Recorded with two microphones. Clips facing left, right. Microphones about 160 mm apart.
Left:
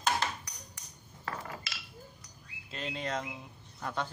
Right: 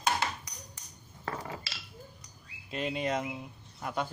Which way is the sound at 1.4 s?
25° right (ahead or behind).